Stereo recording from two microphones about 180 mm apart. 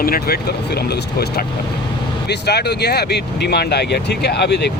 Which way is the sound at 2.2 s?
65° left (ahead or behind).